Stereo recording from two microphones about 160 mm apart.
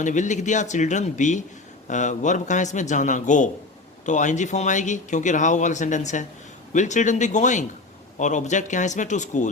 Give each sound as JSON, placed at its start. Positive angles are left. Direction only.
{"t": 0.0, "sound": "speech", "side_deg": 50}